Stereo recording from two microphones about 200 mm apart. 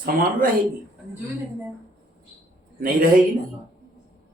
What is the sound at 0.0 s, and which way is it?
Speech, 45° right (ahead or behind).